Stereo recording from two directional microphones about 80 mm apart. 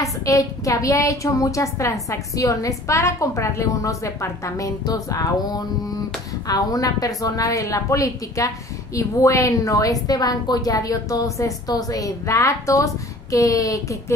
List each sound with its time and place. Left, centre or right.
0.0 s a woman's voice: left